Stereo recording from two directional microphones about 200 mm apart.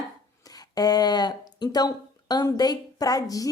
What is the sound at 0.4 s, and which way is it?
A woman's voice, 20° left (ahead or behind).